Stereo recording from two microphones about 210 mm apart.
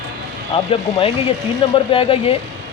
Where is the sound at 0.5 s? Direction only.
25° left (ahead or behind).